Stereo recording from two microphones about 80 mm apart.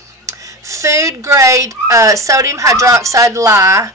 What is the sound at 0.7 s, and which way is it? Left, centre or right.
Speech, right.